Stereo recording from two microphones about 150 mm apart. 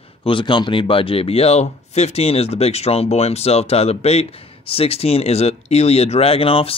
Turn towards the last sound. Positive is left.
turn(degrees=40)  # may be behind; listen again after turning